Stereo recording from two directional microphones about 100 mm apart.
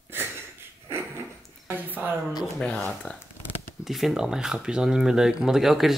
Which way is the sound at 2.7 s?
5° left (ahead or behind).